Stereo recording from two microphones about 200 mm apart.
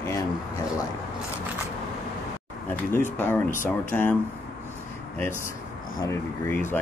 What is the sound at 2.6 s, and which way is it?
Speech, 10° left (ahead or behind).